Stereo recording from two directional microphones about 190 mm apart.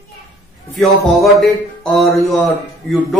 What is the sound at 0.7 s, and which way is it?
Speech, centre (ahead or behind).